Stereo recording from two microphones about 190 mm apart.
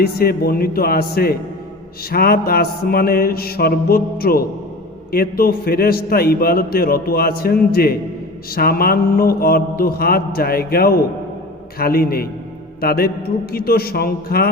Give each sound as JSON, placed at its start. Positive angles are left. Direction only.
{"t": 0.0, "sound": "a man's voice", "side_deg": 55}